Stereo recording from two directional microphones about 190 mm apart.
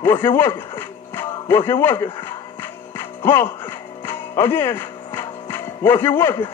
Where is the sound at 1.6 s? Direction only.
10° left (ahead or behind).